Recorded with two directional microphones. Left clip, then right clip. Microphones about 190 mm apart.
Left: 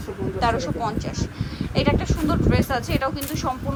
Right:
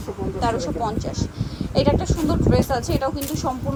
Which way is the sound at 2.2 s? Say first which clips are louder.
Right 2 dB; 20° right (ahead or behind).